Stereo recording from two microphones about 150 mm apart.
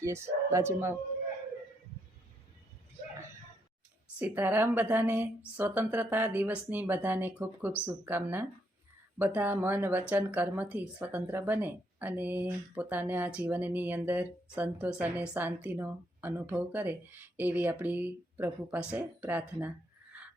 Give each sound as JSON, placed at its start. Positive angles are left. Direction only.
{"t": 0.0, "sound": "speech", "side_deg": -20}
{"t": 4.2, "sound": "speech", "side_deg": -15}